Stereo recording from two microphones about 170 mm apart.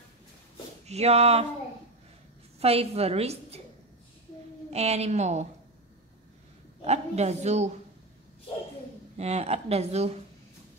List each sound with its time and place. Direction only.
0.8 s a woman's voice: 40° right (ahead or behind)
2.6 s a woman's voice: 35° right (ahead or behind)
4.6 s a woman's voice: 40° right (ahead or behind)
6.8 s a woman's voice: 40° right (ahead or behind)
9.1 s a woman's voice: 40° right (ahead or behind)